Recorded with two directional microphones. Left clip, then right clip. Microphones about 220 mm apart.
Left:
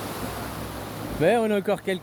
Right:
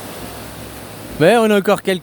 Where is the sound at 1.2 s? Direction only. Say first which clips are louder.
Right 9 dB; 45° right (ahead or behind).